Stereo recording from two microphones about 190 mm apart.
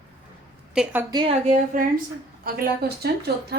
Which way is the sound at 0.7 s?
5° right (ahead or behind).